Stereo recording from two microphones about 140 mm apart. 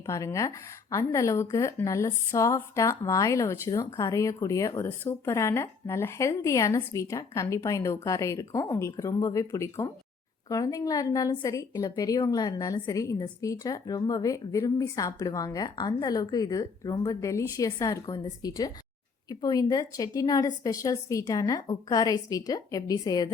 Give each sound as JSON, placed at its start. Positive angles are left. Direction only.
{"t": 0.0, "sound": "a woman's voice", "side_deg": 20}